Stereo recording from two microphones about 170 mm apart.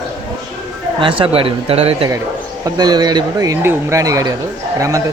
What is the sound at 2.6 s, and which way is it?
Speech, 20° right (ahead or behind).